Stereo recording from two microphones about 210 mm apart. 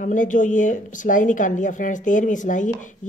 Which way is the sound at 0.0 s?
40° left (ahead or behind).